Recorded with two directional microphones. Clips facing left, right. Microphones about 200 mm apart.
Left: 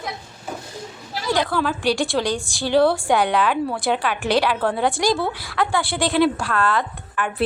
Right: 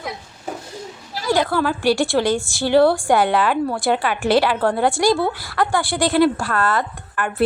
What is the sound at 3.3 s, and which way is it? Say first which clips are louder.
A woman's voice: right 2 dB; centre (ahead or behind).